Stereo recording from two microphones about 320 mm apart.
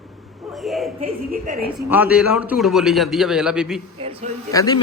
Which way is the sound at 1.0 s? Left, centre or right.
Right.